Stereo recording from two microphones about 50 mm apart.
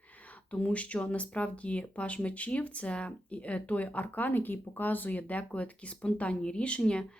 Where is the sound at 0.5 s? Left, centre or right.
Left.